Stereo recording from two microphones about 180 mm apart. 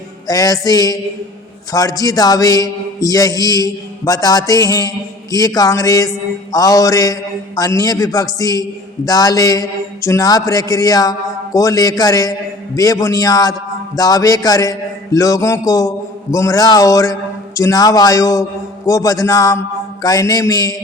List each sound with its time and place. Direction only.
0.3 s a man's voice: 20° left (ahead or behind)